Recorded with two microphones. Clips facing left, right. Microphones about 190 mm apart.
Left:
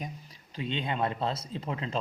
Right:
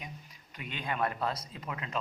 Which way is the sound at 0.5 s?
25° left (ahead or behind).